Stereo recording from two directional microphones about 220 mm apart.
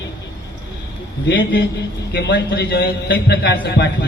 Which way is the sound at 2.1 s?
45° left (ahead or behind).